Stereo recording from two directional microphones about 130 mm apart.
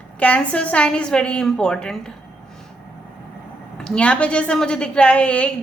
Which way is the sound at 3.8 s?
5° left (ahead or behind).